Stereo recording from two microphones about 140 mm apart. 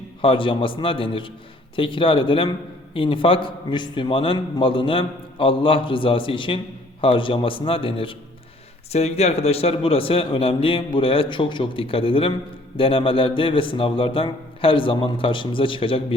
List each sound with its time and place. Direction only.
0.2 s a man's voice: 40° left (ahead or behind)